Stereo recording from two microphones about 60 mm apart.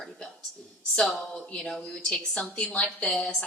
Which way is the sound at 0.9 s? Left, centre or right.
Centre.